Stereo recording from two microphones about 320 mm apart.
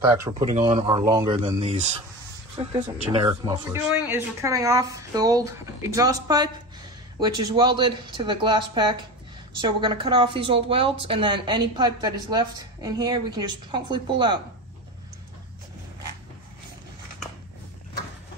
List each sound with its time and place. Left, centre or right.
0.5 s a woman's voice: right